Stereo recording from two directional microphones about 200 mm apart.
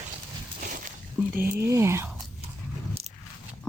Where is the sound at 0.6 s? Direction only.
40° right (ahead or behind).